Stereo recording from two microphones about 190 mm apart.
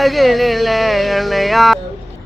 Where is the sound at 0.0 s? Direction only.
Centre (ahead or behind).